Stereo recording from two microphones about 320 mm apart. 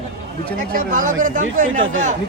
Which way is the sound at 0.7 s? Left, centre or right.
Right.